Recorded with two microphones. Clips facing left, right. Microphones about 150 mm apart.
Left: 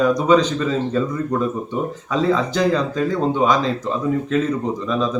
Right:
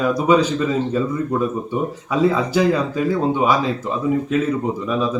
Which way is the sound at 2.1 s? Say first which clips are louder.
Right 1 dB; 10° right (ahead or behind).